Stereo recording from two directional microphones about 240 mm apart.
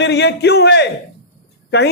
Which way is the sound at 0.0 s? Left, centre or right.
Left.